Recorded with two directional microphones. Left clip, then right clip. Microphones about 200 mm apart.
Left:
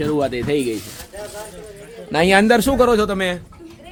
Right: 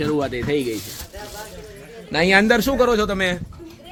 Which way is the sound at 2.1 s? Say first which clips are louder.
Left 2 dB; 25° left (ahead or behind).